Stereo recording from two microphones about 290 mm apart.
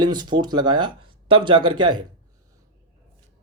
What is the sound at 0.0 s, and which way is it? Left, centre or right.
Speech, centre.